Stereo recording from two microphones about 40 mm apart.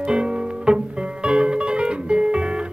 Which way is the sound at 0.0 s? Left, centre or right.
Right.